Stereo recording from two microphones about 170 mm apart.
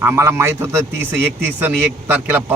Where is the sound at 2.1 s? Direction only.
10° right (ahead or behind).